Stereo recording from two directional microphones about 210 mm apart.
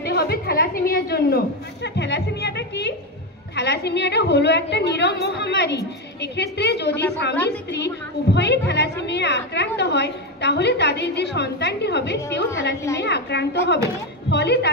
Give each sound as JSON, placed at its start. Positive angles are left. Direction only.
{"t": 0.0, "sound": "a woman's voice", "side_deg": 50}